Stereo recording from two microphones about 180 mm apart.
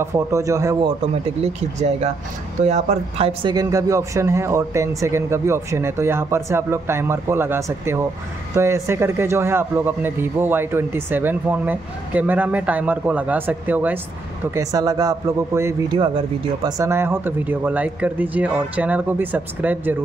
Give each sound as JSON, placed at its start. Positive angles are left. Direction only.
{"t": 0.0, "sound": "a man's voice", "side_deg": -15}
{"t": 1.8, "sound": "speech", "side_deg": -40}
{"t": 3.5, "sound": "a man's voice", "side_deg": -20}